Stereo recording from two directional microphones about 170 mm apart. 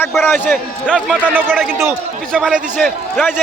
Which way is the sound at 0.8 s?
5° right (ahead or behind).